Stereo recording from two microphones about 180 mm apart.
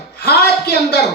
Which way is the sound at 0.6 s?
65° left (ahead or behind).